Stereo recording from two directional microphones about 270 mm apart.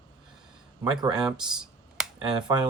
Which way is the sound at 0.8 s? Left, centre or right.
Centre.